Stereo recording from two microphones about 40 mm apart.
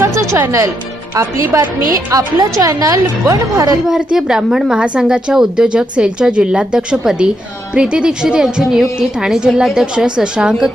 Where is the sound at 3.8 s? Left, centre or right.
Centre.